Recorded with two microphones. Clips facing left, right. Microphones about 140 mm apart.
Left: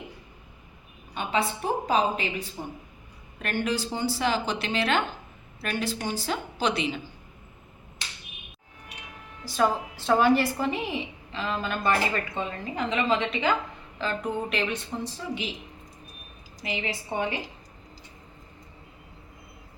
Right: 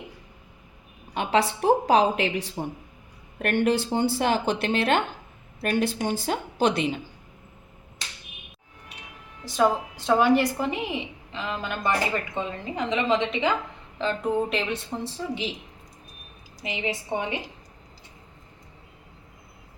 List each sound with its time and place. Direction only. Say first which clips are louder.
1.1 s a woman's voice: right 4 dB; 85° right
3.3 s a woman's voice: right 6 dB; 55° right (ahead or behind)
9.4 s a woman's voice: right 2 dB; 20° right (ahead or behind)
16.6 s a woman's voice: right 2 dB; 20° right (ahead or behind)